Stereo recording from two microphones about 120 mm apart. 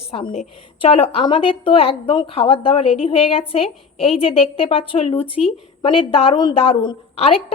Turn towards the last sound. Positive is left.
turn(degrees=50)  # may be behind; listen again after turning